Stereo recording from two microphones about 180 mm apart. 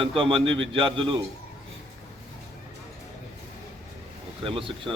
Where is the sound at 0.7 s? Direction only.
30° right (ahead or behind).